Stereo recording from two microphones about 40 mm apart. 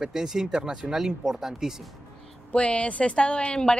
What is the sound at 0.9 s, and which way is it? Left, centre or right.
Speech, centre.